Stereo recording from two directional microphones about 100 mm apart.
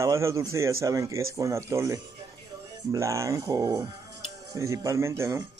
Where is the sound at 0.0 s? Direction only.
30° right (ahead or behind).